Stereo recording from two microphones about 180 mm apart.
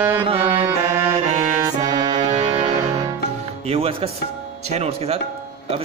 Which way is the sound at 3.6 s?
35° right (ahead or behind).